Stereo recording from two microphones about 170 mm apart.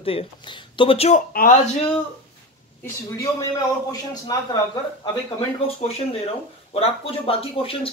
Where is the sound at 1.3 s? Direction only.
55° left (ahead or behind).